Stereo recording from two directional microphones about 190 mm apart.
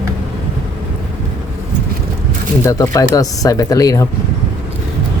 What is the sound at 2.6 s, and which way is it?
Speech, 15° left (ahead or behind).